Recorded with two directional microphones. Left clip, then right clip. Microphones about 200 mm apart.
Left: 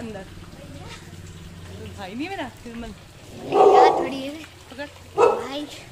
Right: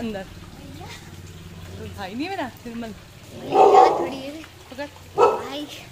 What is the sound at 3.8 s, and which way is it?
Speech, 40° left (ahead or behind).